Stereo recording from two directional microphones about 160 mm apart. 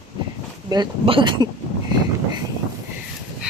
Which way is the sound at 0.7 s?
30° right (ahead or behind).